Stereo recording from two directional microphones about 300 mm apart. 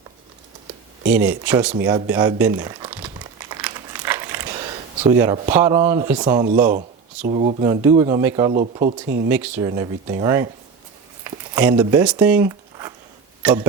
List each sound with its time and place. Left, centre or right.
1.1 s speech: centre
3.5 s crumpling: centre
5.1 s speech: centre
6.7 s speech: right
8.5 s speech: right
9.3 s speech: centre
11.2 s a sound: centre
11.8 s speech: centre